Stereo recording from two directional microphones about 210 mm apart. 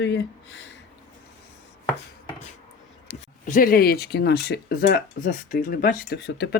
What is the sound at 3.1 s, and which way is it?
Speech, 40° left (ahead or behind).